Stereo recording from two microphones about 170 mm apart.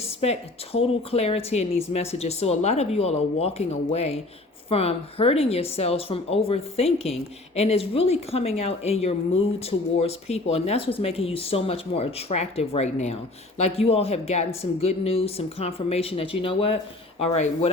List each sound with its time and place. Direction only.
0.0 s speech: 35° left (ahead or behind)